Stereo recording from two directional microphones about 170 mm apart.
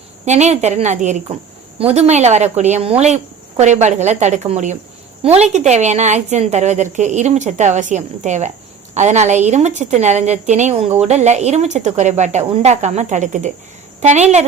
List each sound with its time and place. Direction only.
0.3 s a woman's voice: 40° right (ahead or behind)